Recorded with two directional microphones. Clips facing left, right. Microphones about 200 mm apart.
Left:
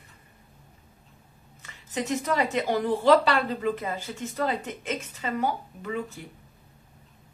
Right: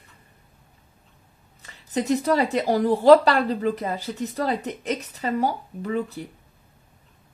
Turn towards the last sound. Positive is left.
turn(degrees=-35)  # may be behind; listen again after turning